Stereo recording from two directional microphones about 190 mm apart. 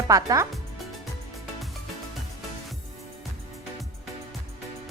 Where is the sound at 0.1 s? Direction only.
15° right (ahead or behind).